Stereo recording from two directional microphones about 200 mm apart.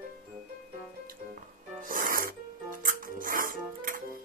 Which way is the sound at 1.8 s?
45° right (ahead or behind).